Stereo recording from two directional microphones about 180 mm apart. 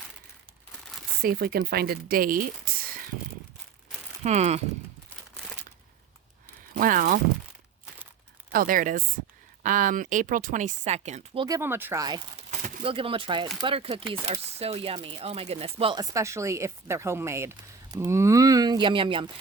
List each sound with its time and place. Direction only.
1.2 s speech: 55° right (ahead or behind)
2.7 s a sound: 55° right (ahead or behind)
4.2 s speech: 40° right (ahead or behind)
6.7 s speech: 50° right (ahead or behind)
8.5 s speech: 50° right (ahead or behind)
11.4 s speech: 15° right (ahead or behind)
12.5 s speech: 35° right (ahead or behind)
16.1 s speech: 15° right (ahead or behind)